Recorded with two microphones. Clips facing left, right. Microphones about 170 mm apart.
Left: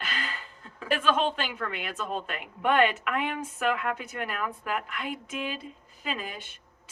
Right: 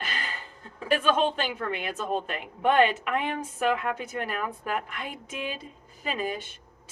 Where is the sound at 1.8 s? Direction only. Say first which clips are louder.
Right 3 dB; 40° right (ahead or behind).